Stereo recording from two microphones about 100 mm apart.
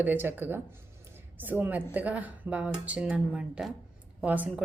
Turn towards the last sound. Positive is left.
turn(degrees=-15)  # may be behind; listen again after turning